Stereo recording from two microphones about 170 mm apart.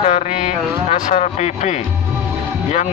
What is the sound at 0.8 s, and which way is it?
Speech, 45° left (ahead or behind).